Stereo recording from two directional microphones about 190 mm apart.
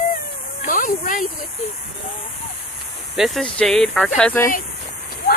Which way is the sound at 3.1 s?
Centre (ahead or behind).